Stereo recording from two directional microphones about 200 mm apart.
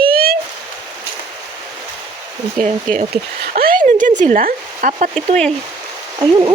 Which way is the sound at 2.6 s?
45° right (ahead or behind).